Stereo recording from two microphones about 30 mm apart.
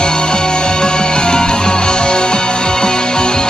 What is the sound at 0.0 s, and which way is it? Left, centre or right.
Music, left.